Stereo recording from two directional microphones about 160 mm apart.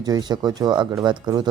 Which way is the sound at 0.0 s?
25° right (ahead or behind).